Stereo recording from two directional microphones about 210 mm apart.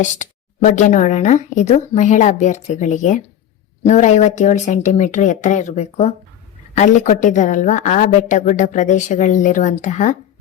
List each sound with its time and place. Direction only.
0.0 s a woman's voice: 35° left (ahead or behind)